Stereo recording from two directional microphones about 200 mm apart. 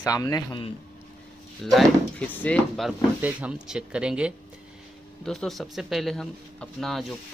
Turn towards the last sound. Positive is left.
turn(degrees=0)  # may be behind; listen again after turning